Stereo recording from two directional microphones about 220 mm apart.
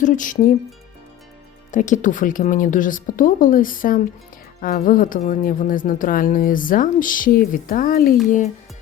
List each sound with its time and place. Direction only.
0.0 s speech: 35° left (ahead or behind)
1.7 s speech: 35° left (ahead or behind)